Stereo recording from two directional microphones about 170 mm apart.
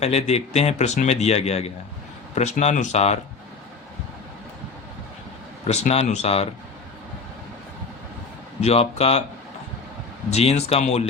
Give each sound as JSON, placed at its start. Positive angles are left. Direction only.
{"t": 0.0, "sound": "speech", "side_deg": 40}
{"t": 5.6, "sound": "speech", "side_deg": 40}
{"t": 8.6, "sound": "speech", "side_deg": 35}
{"t": 10.3, "sound": "speech", "side_deg": 40}